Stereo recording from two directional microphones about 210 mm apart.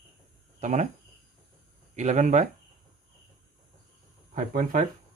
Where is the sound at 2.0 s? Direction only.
35° right (ahead or behind).